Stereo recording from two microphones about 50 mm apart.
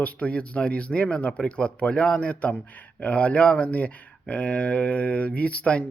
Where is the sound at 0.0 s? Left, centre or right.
Left.